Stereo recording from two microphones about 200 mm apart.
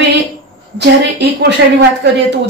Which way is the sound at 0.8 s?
60° right (ahead or behind).